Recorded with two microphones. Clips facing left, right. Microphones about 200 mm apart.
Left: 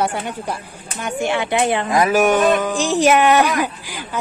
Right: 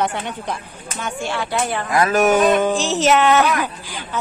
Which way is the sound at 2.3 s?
20° right (ahead or behind).